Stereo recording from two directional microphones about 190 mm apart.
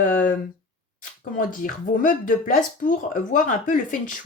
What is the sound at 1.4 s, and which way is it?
Speech, 45° left (ahead or behind).